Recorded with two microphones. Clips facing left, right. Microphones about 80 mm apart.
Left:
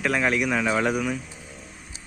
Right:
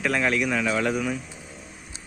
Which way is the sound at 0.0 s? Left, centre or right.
Centre.